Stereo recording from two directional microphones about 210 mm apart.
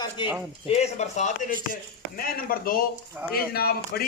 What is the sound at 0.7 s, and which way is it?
Speech, 30° left (ahead or behind).